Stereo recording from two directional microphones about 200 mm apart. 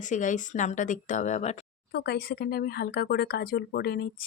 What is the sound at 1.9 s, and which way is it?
Speech, 55° left (ahead or behind).